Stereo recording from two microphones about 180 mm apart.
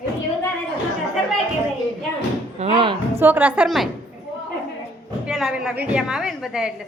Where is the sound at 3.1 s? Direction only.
10° right (ahead or behind).